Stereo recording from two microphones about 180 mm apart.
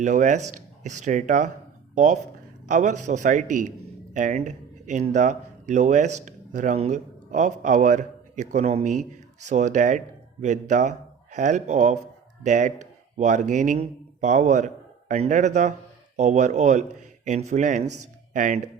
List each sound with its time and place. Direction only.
0.0 s speech: 45° right (ahead or behind)
2.6 s speech: 45° right (ahead or behind)